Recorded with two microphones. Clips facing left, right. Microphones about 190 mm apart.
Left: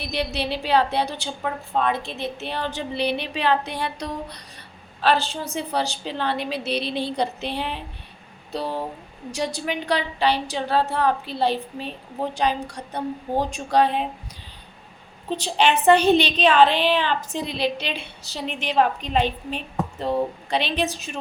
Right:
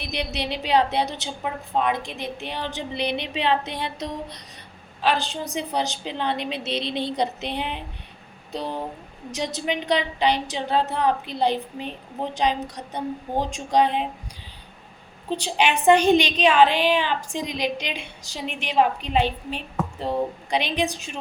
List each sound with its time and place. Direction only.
0.0 s a woman's voice: 20° right (ahead or behind)
15.4 s a woman's voice: 10° right (ahead or behind)